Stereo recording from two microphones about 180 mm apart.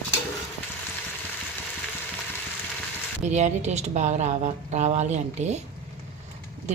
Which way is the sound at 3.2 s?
40° right (ahead or behind).